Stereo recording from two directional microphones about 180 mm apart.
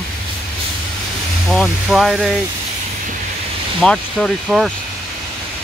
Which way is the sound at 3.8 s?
5° left (ahead or behind).